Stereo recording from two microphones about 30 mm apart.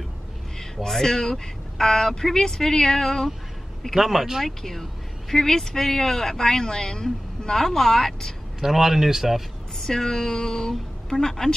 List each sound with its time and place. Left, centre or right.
0.8 s speech: centre
3.9 s speech: centre
5.3 s speech: centre
8.5 s speech: centre
9.8 s female singing: centre
11.1 s speech: centre